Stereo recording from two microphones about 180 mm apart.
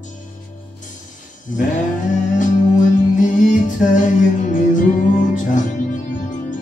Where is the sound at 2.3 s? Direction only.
45° left (ahead or behind).